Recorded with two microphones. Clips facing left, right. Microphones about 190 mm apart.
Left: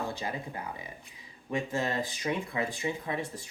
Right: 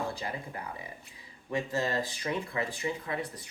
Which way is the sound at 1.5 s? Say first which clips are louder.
Even; 20° left (ahead or behind).